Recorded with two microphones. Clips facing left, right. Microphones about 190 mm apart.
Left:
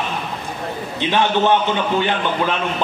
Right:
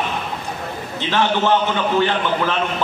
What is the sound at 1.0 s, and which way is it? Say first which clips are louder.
Speech: left 2 dB; 15° left (ahead or behind).